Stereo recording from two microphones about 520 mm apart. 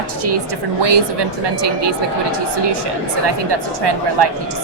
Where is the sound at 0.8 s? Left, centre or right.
Right.